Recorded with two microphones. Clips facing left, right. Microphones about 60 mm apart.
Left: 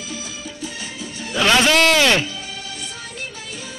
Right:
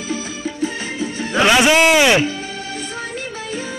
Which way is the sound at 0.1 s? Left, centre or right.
Right.